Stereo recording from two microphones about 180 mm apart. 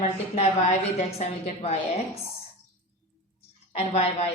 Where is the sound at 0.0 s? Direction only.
35° left (ahead or behind).